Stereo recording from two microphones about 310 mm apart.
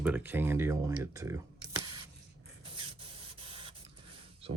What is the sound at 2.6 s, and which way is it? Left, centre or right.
Spray, centre.